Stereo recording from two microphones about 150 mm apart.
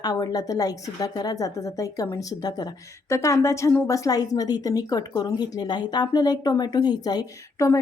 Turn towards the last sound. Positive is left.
turn(degrees=20)  # may be behind; listen again after turning